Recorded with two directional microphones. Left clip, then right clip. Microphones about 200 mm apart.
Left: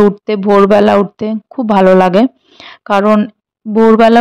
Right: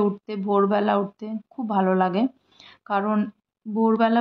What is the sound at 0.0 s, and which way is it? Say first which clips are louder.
Speech: left 15 dB; 40° left (ahead or behind).